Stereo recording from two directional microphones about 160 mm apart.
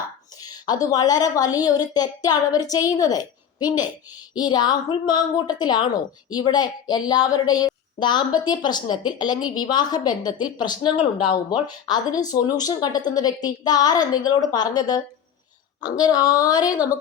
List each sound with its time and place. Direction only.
0.4 s a woman's voice: 25° left (ahead or behind)